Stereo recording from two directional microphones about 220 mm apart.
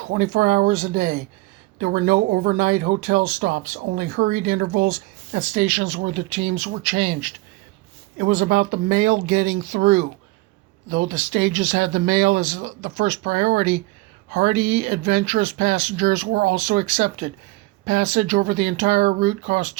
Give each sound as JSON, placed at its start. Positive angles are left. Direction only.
{"t": 0.0, "sound": "speech", "side_deg": -40}
{"t": 16.2, "sound": "speech", "side_deg": -45}
{"t": 16.6, "sound": "speech", "side_deg": -30}